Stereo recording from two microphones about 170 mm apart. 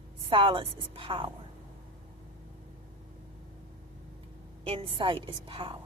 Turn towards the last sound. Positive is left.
turn(degrees=-30)  # may be behind; listen again after turning